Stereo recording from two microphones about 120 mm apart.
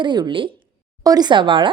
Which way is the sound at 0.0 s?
40° right (ahead or behind).